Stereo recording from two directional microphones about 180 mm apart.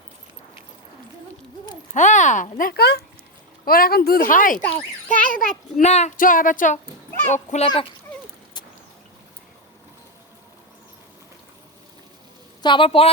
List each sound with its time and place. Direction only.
1.9 s speech: 40° left (ahead or behind)
12.6 s a woman's voice: 30° left (ahead or behind)